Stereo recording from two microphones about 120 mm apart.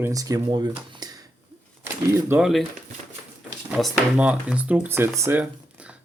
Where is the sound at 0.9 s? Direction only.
35° right (ahead or behind).